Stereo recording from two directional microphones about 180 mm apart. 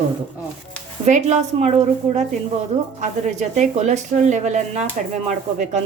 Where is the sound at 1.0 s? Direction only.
40° right (ahead or behind).